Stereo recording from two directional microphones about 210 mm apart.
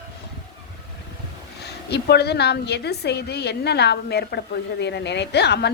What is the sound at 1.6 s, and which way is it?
A woman's voice, 50° left (ahead or behind).